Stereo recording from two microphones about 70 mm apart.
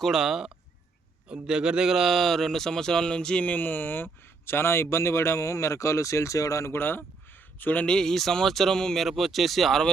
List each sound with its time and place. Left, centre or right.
0.0 s a man's voice: centre; by 6.7 s left
6.7 s speech: left
7.9 s speech: centre